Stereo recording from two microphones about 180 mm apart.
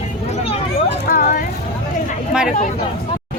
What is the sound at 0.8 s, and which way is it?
Speech, 55° left (ahead or behind).